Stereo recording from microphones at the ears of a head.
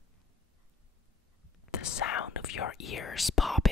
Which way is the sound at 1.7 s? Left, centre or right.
Left.